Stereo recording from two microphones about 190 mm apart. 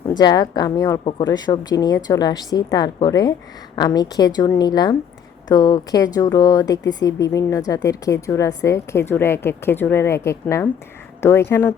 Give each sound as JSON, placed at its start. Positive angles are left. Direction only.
{"t": 0.1, "sound": "a woman's voice", "side_deg": 20}